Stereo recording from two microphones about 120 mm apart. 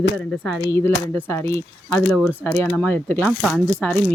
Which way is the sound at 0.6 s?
20° left (ahead or behind).